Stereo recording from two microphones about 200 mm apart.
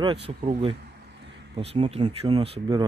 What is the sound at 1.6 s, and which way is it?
Speech, 30° right (ahead or behind).